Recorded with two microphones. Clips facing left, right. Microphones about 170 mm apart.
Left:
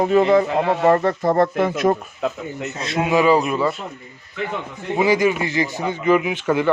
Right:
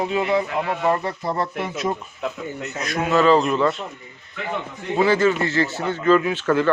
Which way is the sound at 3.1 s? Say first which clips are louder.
Even; 10° left (ahead or behind).